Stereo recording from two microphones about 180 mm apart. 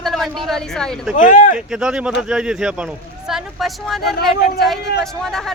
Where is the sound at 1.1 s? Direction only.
45° left (ahead or behind).